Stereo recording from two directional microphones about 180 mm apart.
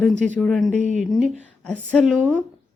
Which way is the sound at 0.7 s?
40° right (ahead or behind).